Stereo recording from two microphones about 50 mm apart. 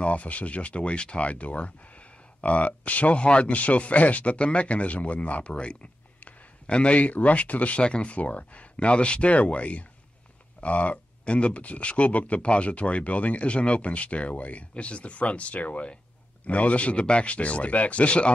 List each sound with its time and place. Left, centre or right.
0.0 s speech: left